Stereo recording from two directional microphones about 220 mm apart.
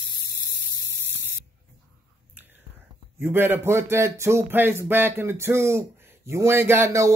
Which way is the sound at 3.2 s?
10° right (ahead or behind).